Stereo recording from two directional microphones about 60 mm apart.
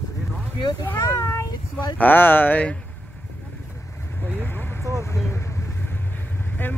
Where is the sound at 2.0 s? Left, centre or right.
Left.